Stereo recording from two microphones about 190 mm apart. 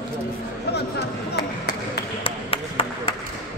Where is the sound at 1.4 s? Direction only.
60° left (ahead or behind).